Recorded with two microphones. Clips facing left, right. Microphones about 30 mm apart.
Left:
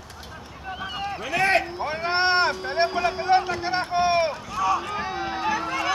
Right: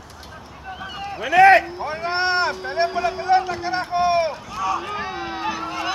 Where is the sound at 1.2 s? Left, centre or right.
Right.